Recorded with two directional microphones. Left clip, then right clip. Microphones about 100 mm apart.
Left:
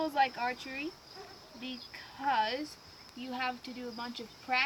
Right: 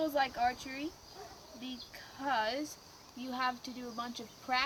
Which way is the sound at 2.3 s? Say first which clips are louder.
Left 3 dB; 30° right (ahead or behind).